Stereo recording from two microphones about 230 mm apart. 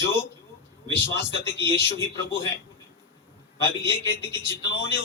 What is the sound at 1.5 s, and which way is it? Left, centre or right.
Speech, centre.